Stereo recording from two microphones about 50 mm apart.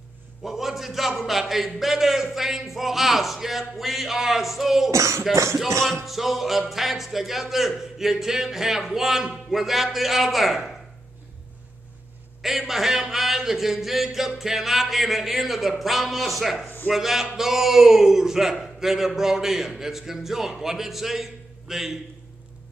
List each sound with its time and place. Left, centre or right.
0.4 s a man's voice: centre
4.9 s music: right
6.0 s a man's voice: centre
12.4 s a man's voice: centre
16.6 s a sound: left
16.9 s a man's voice: centre